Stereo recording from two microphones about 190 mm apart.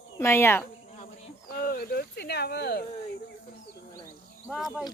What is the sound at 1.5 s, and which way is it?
Speech, 55° left (ahead or behind).